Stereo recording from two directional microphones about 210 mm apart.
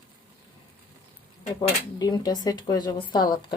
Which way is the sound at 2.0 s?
20° left (ahead or behind).